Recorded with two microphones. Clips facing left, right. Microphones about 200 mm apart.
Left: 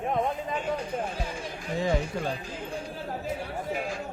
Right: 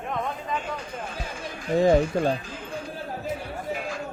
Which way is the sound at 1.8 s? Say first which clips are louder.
Right 8 dB; 40° right (ahead or behind).